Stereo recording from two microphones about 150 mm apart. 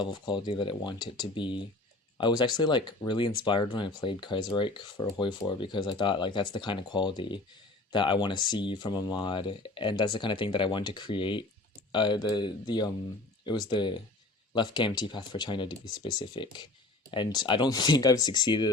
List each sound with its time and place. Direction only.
0.0 s speech: 30° left (ahead or behind)